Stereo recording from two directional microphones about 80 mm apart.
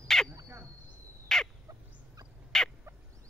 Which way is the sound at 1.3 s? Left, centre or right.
Centre.